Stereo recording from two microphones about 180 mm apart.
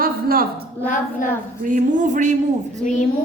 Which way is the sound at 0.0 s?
55° right (ahead or behind).